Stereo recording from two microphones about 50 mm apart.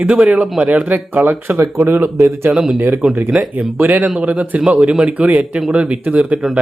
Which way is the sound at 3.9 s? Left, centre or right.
Right.